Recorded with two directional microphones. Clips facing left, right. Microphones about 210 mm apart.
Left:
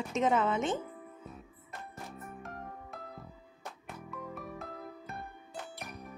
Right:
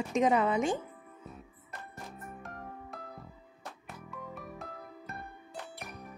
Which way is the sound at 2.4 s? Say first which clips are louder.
Even; centre (ahead or behind).